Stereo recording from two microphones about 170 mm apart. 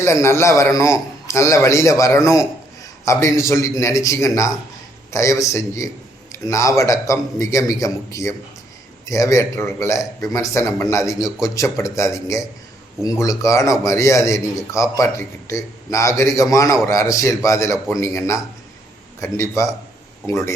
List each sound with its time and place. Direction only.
0.0 s a man's voice: 15° left (ahead or behind)